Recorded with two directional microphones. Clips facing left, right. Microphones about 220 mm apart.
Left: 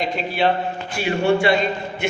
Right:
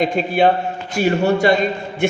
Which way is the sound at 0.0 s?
50° right (ahead or behind).